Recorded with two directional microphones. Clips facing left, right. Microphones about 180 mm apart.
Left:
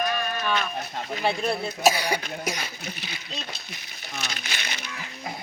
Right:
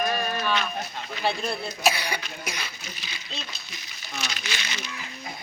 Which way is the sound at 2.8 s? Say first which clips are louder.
Left 5 dB; 60° left (ahead or behind).